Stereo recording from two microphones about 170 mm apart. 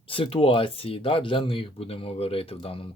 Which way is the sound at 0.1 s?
35° left (ahead or behind).